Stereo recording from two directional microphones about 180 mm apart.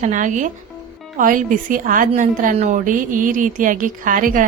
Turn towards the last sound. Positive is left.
turn(degrees=-50)  # may be behind; listen again after turning